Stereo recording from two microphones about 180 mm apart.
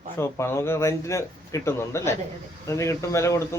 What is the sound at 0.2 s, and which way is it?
Speech, 15° left (ahead or behind).